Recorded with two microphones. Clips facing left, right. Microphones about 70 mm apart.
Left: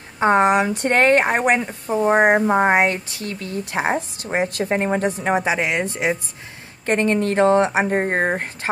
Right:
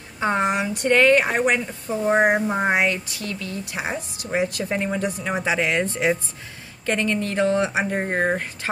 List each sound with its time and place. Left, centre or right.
0.2 s speech: left
5.3 s speech: left
6.9 s speech: left